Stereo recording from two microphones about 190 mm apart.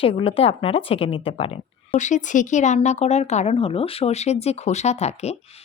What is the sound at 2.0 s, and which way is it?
A woman's voice, 40° left (ahead or behind).